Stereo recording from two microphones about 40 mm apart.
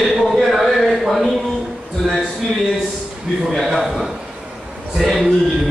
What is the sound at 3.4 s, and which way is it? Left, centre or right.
Speech, centre.